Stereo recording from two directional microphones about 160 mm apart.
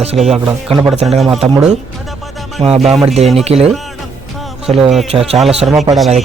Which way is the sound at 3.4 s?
40° right (ahead or behind).